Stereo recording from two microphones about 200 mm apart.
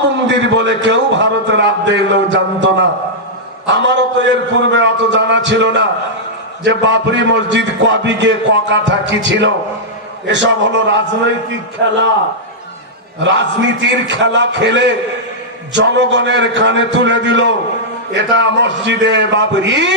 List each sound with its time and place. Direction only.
0.3 s a man's voice: 65° right (ahead or behind)
13.1 s a man's voice: 65° right (ahead or behind)